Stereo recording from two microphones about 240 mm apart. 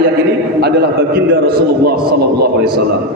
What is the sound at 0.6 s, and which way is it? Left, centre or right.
A man's voice, right.